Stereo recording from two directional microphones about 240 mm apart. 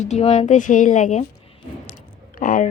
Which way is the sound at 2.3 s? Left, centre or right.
Left.